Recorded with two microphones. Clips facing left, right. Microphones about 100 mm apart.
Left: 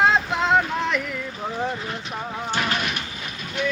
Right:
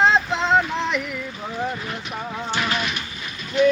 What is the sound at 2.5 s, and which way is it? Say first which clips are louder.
Artillery fire: even; 45° left (ahead or behind).